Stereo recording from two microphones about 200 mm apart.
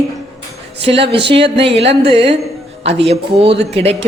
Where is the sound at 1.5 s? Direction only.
30° right (ahead or behind).